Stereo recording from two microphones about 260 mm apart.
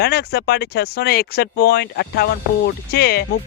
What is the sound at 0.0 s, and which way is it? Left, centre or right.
Speech, left.